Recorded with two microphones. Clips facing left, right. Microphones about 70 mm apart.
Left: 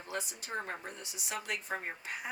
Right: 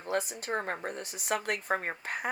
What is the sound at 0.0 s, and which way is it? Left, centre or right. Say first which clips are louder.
Speech: right 8 dB; right.